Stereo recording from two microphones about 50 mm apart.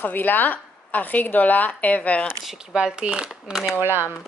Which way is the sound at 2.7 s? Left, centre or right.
Centre.